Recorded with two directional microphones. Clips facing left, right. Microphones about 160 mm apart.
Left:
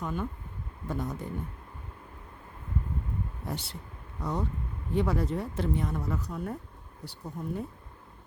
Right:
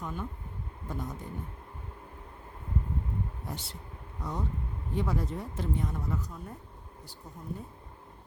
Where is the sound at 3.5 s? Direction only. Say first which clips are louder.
Left 4 dB; 70° left (ahead or behind).